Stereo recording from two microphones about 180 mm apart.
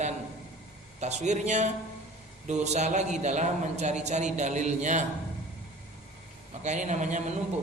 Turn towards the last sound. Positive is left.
turn(degrees=-40)  # may be behind; listen again after turning